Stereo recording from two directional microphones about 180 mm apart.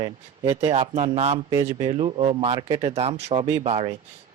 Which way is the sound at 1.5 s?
15° right (ahead or behind).